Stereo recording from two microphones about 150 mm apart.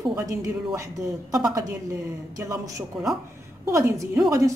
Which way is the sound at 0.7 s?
20° right (ahead or behind).